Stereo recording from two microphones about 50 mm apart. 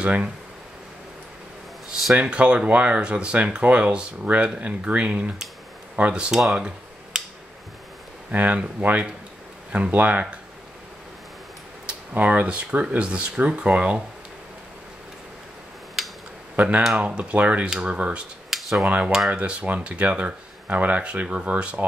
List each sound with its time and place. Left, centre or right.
0.0 s speech: right
2.2 s speech: right
6.5 s computer keyboard: centre
8.3 s speech: right
11.8 s a sound: right
12.4 s speech: right
16.5 s speech: right
18.5 s a sound: centre
18.9 s speech: right